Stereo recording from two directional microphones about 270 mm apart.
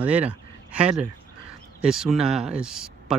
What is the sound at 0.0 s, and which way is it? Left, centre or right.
Speech, centre.